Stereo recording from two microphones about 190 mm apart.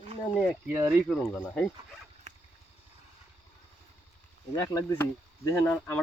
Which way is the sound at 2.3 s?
40° right (ahead or behind).